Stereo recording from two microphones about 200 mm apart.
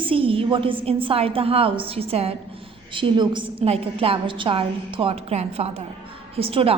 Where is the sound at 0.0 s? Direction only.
25° right (ahead or behind).